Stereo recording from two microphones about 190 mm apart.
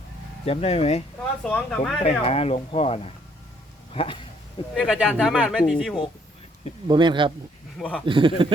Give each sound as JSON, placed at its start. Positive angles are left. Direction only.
{"t": 0.4, "sound": "speech", "side_deg": 30}
{"t": 1.5, "sound": "a man's voice", "side_deg": 5}
{"t": 2.2, "sound": "speech", "side_deg": 30}
{"t": 4.7, "sound": "a man's voice", "side_deg": 0}
{"t": 6.8, "sound": "speech", "side_deg": -25}
{"t": 7.8, "sound": "a man's voice", "side_deg": 5}
{"t": 8.0, "sound": "speech", "side_deg": -25}